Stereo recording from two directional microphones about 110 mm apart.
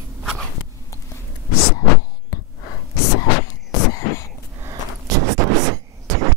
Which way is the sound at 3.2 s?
30° left (ahead or behind).